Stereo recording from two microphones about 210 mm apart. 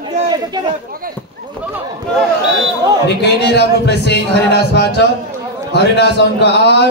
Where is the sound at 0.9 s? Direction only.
45° right (ahead or behind).